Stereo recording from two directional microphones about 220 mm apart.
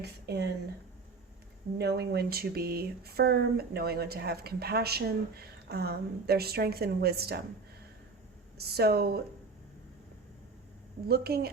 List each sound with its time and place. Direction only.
0.0 s speech: 50° right (ahead or behind)
1.8 s speech: 50° right (ahead or behind)
8.5 s speech: 45° right (ahead or behind)
11.1 s speech: 45° right (ahead or behind)